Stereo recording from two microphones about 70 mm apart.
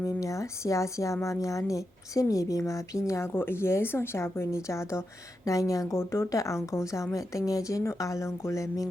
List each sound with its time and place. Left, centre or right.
0.0 s a woman's voice: left
6.0 s a woman's voice: left